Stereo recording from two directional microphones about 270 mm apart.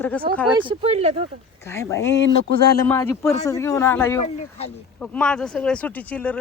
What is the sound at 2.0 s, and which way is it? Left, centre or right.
Speech, left.